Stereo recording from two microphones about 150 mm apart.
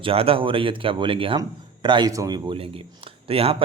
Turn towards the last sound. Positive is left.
turn(degrees=-40)  # may be behind; listen again after turning